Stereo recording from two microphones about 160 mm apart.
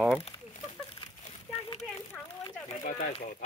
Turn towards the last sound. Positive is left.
turn(degrees=50)  # may be behind; listen again after turning